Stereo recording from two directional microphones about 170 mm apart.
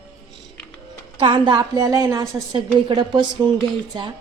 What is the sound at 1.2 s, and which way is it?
A woman's voice, 30° right (ahead or behind).